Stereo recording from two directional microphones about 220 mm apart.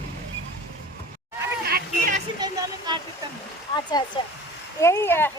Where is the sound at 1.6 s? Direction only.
40° right (ahead or behind).